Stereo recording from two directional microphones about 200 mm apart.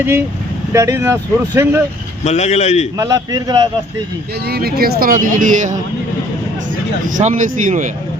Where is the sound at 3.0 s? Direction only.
15° right (ahead or behind).